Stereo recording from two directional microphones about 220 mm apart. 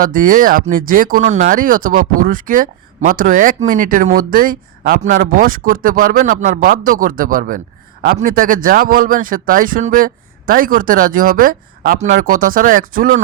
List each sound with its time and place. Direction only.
0.0 s speech: 40° right (ahead or behind)